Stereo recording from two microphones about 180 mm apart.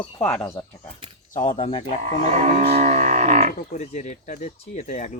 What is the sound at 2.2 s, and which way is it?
Music, 45° right (ahead or behind).